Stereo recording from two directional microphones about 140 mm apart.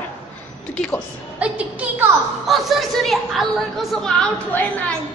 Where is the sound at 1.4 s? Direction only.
10° right (ahead or behind); by 4.8 s 10° left (ahead or behind).